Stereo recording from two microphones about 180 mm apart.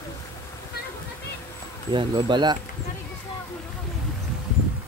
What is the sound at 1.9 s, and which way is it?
Speech, 25° right (ahead or behind).